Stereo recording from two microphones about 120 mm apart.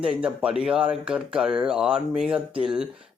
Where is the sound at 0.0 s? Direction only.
10° right (ahead or behind).